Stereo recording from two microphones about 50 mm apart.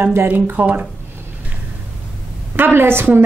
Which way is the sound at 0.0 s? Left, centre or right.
Right.